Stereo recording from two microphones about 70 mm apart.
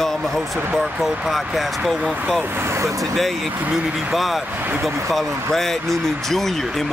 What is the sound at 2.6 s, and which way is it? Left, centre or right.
Speech, right.